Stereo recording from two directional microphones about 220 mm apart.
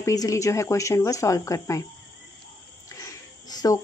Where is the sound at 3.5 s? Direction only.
15° left (ahead or behind).